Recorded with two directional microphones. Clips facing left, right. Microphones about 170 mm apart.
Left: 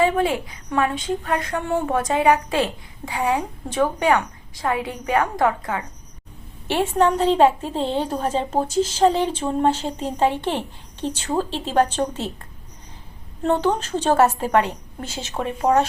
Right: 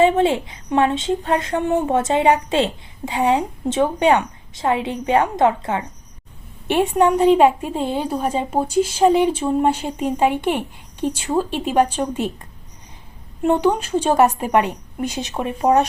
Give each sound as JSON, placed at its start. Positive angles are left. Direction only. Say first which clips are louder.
{"t": 0.0, "sound": "a woman's voice", "louder": "right 4 dB", "side_deg": -25}